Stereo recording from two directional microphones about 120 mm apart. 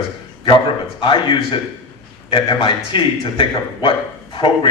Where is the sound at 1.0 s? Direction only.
45° left (ahead or behind).